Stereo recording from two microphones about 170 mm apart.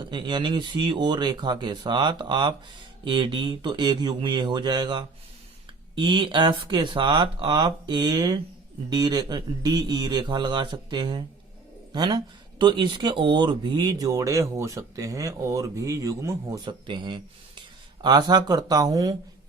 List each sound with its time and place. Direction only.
0.0 s speech: 25° right (ahead or behind)
16.6 s speech: 30° right (ahead or behind)